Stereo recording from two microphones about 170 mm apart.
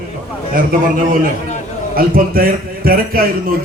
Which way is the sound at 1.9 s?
60° right (ahead or behind).